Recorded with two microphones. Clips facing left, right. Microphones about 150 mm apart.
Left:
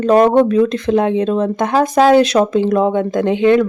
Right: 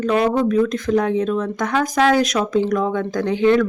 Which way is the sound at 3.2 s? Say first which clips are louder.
Left 3 dB; 55° left (ahead or behind).